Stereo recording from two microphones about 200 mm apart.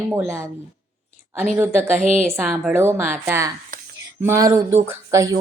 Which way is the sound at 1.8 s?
35° right (ahead or behind).